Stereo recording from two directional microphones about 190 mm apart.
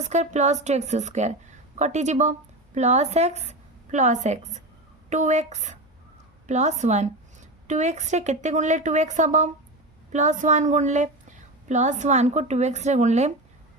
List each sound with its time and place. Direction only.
0.0 s a woman's voice: 40° right (ahead or behind)